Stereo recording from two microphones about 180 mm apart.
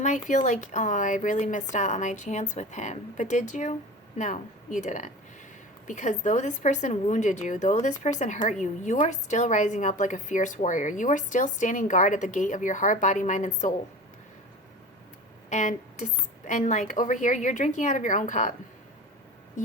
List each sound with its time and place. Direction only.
0.0 s a woman's voice: 40° left (ahead or behind)
15.4 s a woman's voice: 40° left (ahead or behind)